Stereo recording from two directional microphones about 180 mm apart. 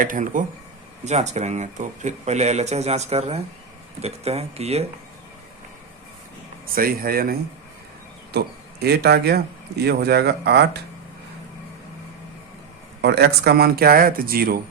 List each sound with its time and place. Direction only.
0.0 s speech: 50° right (ahead or behind)
6.7 s a man's voice: 55° right (ahead or behind)
13.0 s a man's voice: 65° right (ahead or behind)